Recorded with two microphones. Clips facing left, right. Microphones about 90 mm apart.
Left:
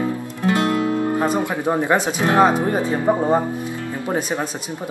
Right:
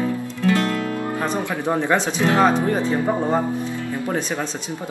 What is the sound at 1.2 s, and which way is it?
Speech, 15° left (ahead or behind).